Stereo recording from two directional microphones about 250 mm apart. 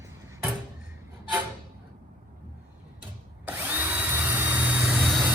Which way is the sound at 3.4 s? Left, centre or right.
Centre.